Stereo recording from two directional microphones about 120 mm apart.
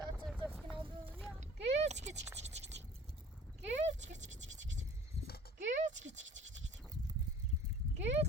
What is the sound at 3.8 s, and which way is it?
Scratch, 85° right.